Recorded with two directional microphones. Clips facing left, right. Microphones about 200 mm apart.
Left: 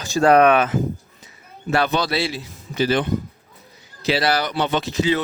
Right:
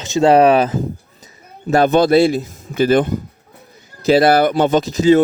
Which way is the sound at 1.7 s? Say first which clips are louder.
Right 9 dB; 45° right (ahead or behind).